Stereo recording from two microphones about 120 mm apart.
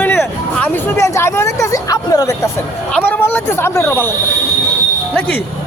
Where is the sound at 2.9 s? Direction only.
15° left (ahead or behind).